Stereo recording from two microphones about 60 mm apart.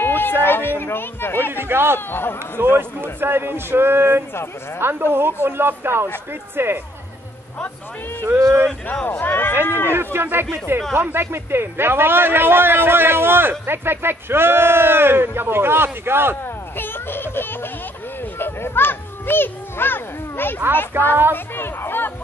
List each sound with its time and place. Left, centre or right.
0.0 s a sound: left
1.5 s a man's voice: right
2.0 s speech: left
2.6 s a man's voice: right
9.2 s speech: left
9.9 s a man's voice: right
16.4 s a sound: left
20.9 s a man's voice: right
21.5 s speech: left